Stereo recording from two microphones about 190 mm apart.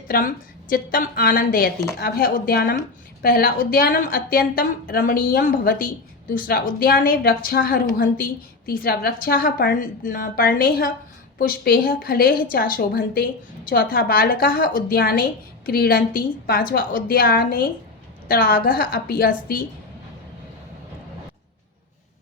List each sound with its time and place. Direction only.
0.1 s a woman's voice: 55° left (ahead or behind)